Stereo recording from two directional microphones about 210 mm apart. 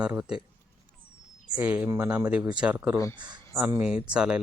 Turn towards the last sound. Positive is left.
turn(degrees=-5)  # may be behind; listen again after turning